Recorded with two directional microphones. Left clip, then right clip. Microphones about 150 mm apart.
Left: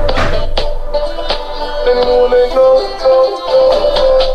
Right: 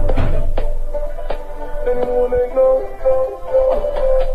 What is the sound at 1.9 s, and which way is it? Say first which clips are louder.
Music: left 7 dB; 30° left (ahead or behind).